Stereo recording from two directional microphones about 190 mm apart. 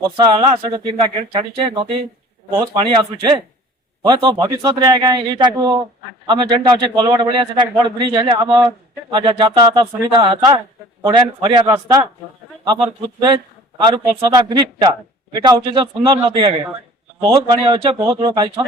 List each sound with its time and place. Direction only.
0.2 s a man's voice: 25° right (ahead or behind)
13.1 s a man's voice: 20° right (ahead or behind)